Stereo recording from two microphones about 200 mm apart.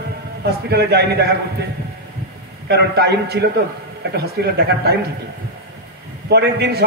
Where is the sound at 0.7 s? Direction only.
55° right (ahead or behind).